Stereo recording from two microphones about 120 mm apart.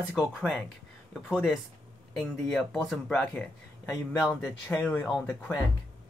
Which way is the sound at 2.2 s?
5° left (ahead or behind).